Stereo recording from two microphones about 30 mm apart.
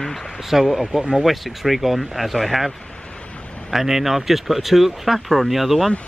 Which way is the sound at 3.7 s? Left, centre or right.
Centre.